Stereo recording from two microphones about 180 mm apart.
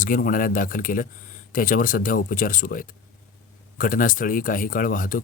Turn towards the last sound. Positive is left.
turn(degrees=50)  # may be behind; listen again after turning